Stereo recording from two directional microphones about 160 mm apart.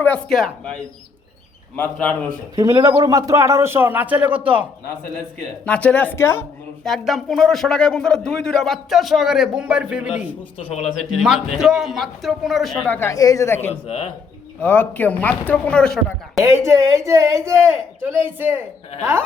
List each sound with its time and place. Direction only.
0.0 s speech: 5° left (ahead or behind)
2.6 s a man's voice: 20° right (ahead or behind)
5.6 s speech: 10° left (ahead or behind)
6.8 s speech: centre (ahead or behind)
10.6 s speech: 40° left (ahead or behind)
11.2 s speech: 5° right (ahead or behind)
13.0 s speech: 20° left (ahead or behind)
13.8 s speech: 35° left (ahead or behind)
14.6 s speech: 10° left (ahead or behind)
16.4 s a man's voice: 15° right (ahead or behind)